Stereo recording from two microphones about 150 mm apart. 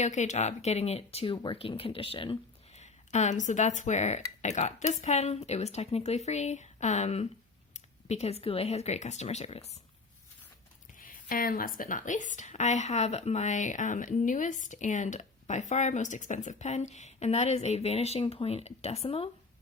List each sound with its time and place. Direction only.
0.0 s speech: 50° left (ahead or behind); by 2.4 s 35° left (ahead or behind)
2.7 s a woman's voice: 50° left (ahead or behind)
11.0 s a woman's voice: 65° left (ahead or behind); by 19.3 s 40° left (ahead or behind)